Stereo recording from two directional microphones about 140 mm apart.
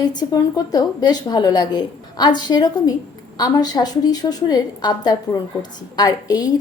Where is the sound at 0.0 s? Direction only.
30° left (ahead or behind).